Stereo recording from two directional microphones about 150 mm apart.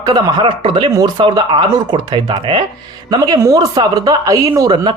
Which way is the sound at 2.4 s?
40° right (ahead or behind).